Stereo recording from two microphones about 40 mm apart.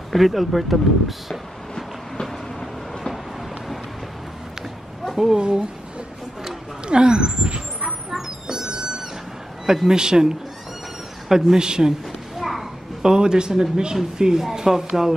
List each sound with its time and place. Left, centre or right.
0.1 s speech: centre
2.2 s train: centre
5.1 s speech: centre
5.4 s a man's voice: right
6.9 s speech: right
8.1 s a sound: centre
9.8 s speech: centre
11.2 s a man's voice: centre
11.5 s a man's voice: centre
12.4 s children playing: centre
13.0 s a man's voice: centre